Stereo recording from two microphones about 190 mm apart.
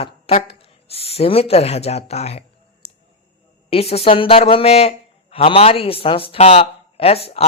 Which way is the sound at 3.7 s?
30° left (ahead or behind).